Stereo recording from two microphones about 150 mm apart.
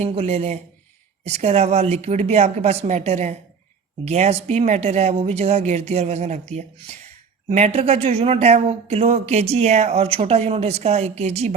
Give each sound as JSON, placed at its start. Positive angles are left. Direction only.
{"t": 0.0, "sound": "speech", "side_deg": -45}